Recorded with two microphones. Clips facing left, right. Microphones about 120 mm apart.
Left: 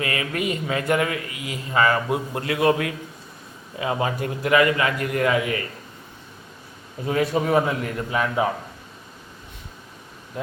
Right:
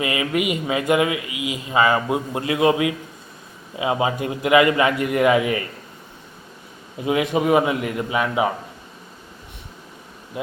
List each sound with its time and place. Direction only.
0.0 s a man's voice: 15° right (ahead or behind)
7.0 s a man's voice: 15° right (ahead or behind)
10.3 s a man's voice: 5° right (ahead or behind)